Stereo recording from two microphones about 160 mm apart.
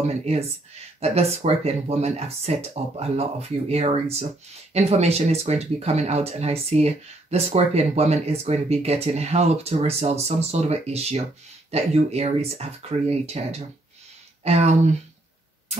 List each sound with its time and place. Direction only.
0.0 s speech: 45° right (ahead or behind)